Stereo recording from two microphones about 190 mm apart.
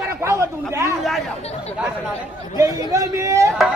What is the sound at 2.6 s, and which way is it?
Speech, 15° right (ahead or behind).